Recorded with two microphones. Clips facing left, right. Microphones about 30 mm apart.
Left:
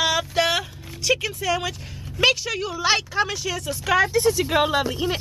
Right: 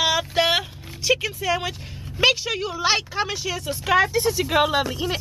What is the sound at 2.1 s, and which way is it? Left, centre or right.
Speech, centre.